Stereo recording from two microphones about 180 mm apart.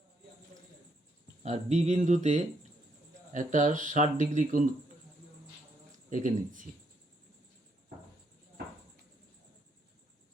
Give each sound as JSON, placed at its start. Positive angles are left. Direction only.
{"t": 1.5, "sound": "speech", "side_deg": -35}
{"t": 6.1, "sound": "speech", "side_deg": -45}